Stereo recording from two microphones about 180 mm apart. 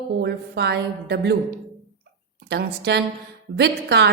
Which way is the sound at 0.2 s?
65° right (ahead or behind).